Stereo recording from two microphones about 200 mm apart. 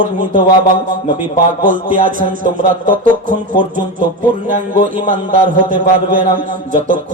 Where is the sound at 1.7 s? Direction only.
40° right (ahead or behind).